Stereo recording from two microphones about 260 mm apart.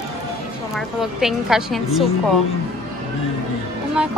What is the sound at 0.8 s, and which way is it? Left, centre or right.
Speech, centre.